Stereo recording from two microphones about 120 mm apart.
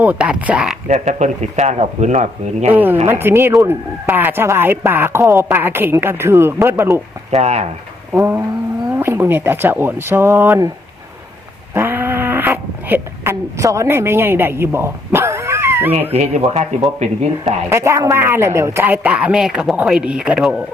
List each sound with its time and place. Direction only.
0.0 s speech: 10° right (ahead or behind)
0.9 s speech: 80° right
2.7 s speech: 15° right (ahead or behind)
7.3 s speech: 60° right (ahead or behind)
8.1 s speech: 25° right (ahead or behind)
11.7 s cat: 20° right (ahead or behind)
16.1 s speech: 65° right (ahead or behind)
17.7 s speech: 25° right (ahead or behind); by 20.6 s 5° right (ahead or behind)